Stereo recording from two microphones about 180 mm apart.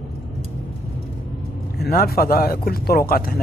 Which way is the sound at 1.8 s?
60° left (ahead or behind).